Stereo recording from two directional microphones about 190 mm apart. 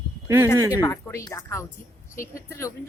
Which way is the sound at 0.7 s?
15° left (ahead or behind).